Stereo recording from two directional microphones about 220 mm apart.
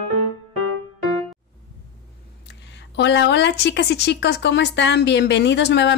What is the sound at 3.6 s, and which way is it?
Speech, 50° left (ahead or behind).